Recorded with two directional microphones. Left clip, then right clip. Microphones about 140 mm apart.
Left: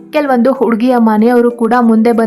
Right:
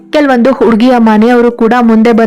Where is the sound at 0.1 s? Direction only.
25° right (ahead or behind).